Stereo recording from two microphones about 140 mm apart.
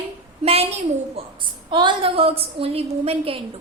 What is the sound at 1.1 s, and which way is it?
A woman's voice, 35° right (ahead or behind).